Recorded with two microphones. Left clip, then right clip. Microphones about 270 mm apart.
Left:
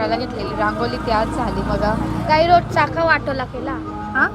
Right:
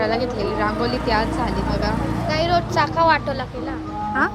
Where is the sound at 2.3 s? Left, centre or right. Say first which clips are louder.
Left 7 dB; centre.